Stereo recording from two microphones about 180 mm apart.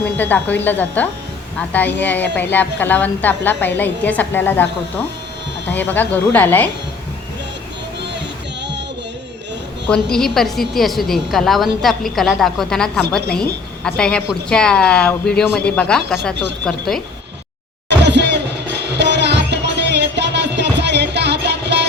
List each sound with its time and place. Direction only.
0.0 s a woman's voice: 10° left (ahead or behind)
9.9 s a woman's voice: 5° left (ahead or behind)
18.0 s music: 70° right (ahead or behind)